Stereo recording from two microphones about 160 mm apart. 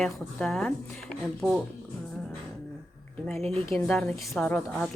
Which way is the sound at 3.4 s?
40° right (ahead or behind).